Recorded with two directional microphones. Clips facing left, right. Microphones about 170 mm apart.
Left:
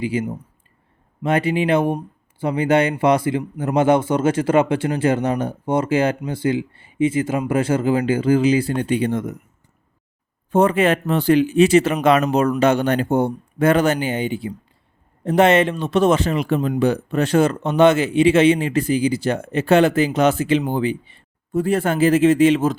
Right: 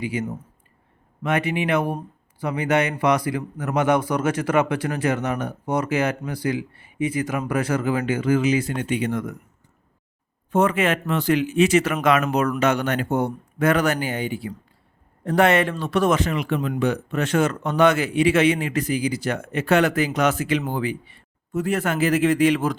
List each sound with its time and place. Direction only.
0.0 s a man's voice: 30° left (ahead or behind)
10.5 s a man's voice: 30° left (ahead or behind)